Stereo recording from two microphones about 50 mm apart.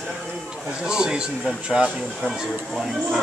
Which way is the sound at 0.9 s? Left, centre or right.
Centre.